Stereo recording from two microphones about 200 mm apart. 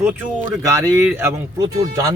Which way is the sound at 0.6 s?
15° right (ahead or behind).